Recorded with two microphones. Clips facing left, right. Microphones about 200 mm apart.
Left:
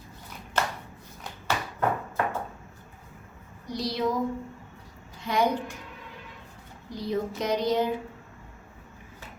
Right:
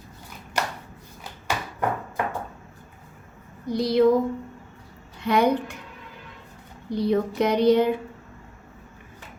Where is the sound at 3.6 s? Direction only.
55° right (ahead or behind).